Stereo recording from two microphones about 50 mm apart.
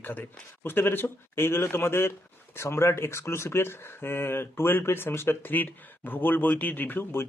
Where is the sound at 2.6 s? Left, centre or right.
Left.